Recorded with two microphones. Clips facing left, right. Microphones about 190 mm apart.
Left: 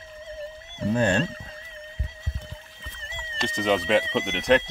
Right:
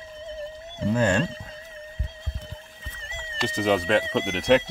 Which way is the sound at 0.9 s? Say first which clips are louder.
Even; 30° left (ahead or behind).